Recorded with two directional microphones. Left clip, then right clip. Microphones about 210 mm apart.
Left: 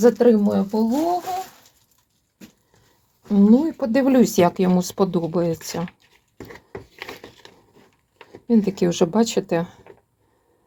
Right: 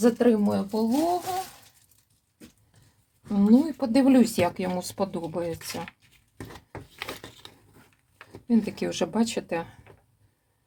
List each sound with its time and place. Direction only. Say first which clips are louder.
0.0 s speech: left 7 dB; 40° left (ahead or behind); by 1.0 s 20° left (ahead or behind)
3.2 s speech: left 5 dB; 30° left (ahead or behind)
7.0 s a sound: right 3 dB; centre (ahead or behind)
8.4 s speech: left 7 dB; 35° left (ahead or behind)